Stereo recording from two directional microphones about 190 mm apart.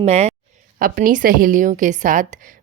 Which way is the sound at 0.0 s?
35° right (ahead or behind).